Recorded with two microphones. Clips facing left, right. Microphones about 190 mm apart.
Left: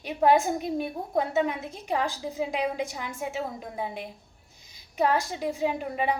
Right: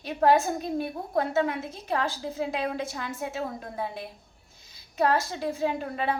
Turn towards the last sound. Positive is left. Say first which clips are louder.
# left 1 dB
turn(degrees=15)  # may be behind; listen again after turning